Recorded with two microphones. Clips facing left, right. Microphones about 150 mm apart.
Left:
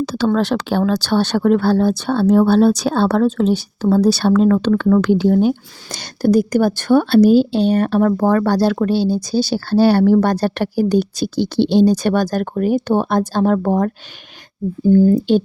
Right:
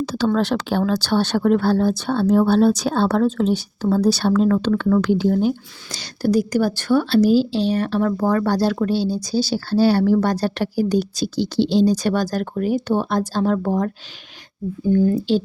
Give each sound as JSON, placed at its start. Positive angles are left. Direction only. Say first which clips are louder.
{"t": 0.0, "sound": "speech", "louder": "left 3 dB", "side_deg": 80}
{"t": 14.8, "sound": "speech", "louder": "left 5 dB", "side_deg": 35}